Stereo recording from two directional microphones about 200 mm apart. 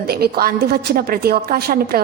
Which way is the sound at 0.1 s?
50° right (ahead or behind).